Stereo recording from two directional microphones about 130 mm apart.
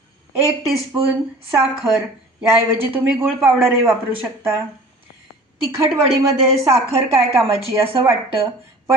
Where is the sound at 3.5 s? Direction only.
20° right (ahead or behind).